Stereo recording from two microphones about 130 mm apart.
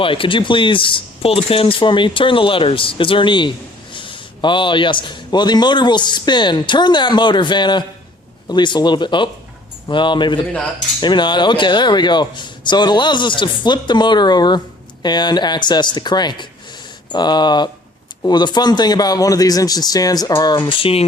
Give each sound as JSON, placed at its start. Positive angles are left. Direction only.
{"t": 0.0, "sound": "a man's voice", "side_deg": 40}